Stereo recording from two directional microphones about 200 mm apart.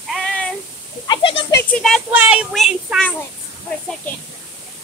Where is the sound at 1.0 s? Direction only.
25° left (ahead or behind).